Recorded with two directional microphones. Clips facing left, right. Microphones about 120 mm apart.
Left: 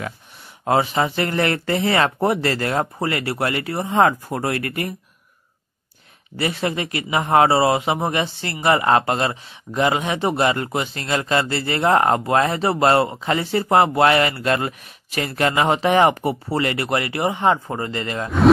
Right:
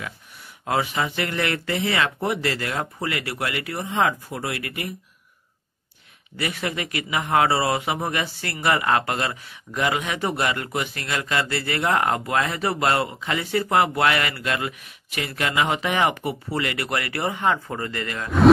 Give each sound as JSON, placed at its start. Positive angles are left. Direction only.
{"t": 0.7, "sound": "speech", "side_deg": 35}
{"t": 3.9, "sound": "speech", "side_deg": 45}
{"t": 6.3, "sound": "speech", "side_deg": 30}